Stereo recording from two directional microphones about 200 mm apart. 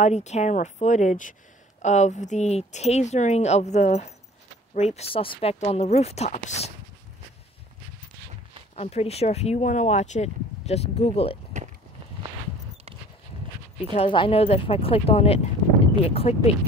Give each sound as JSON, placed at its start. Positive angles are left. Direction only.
{"t": 0.0, "sound": "speech", "side_deg": 35}
{"t": 8.7, "sound": "speech", "side_deg": 30}
{"t": 13.9, "sound": "speech", "side_deg": 25}